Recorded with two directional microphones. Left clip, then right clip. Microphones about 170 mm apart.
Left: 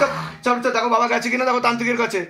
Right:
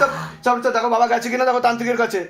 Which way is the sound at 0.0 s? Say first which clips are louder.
Right 2 dB; 30° right (ahead or behind).